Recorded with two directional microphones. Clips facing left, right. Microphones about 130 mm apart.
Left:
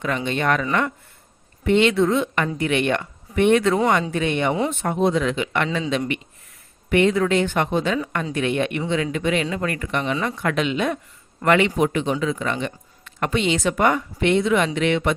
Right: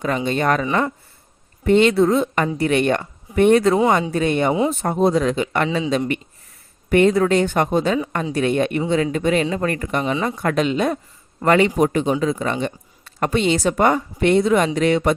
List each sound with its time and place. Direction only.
0.3 s speech: 40° right (ahead or behind)
1.6 s speech: 40° right (ahead or behind)
5.6 s speech: 20° right (ahead or behind)
6.9 s speech: 40° right (ahead or behind)